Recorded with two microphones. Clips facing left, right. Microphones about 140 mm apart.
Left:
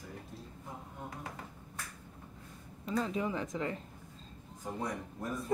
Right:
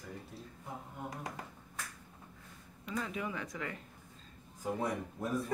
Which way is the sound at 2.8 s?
30° left (ahead or behind).